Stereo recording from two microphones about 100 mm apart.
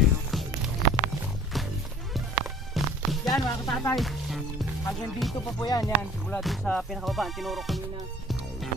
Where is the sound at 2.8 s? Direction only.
Centre (ahead or behind).